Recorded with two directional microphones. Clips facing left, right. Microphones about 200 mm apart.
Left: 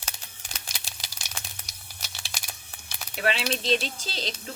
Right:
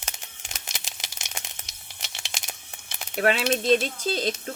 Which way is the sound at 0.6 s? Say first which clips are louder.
Right 2 dB; 20° right (ahead or behind).